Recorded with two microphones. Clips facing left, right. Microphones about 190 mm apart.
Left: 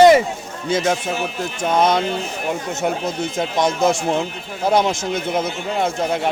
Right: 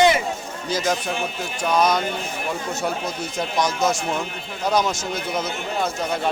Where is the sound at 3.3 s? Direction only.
25° left (ahead or behind).